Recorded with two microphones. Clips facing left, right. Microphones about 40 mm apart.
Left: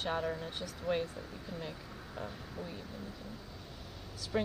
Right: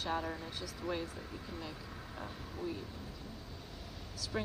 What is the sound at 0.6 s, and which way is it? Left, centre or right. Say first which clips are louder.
Speech: left 4 dB; left.